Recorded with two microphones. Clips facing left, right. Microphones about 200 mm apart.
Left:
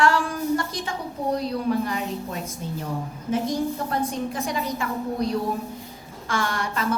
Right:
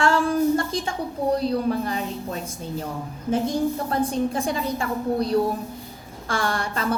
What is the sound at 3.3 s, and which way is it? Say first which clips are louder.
A woman's voice: right 2 dB; 30° right (ahead or behind).